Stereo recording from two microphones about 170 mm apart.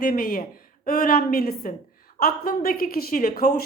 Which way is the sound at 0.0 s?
60° left (ahead or behind).